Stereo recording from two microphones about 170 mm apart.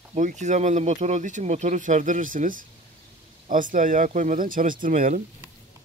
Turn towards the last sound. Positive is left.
turn(degrees=-50)  # may be behind; listen again after turning